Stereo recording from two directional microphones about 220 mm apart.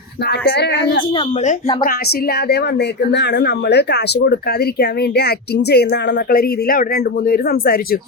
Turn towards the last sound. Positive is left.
turn(degrees=40)  # may be behind; listen again after turning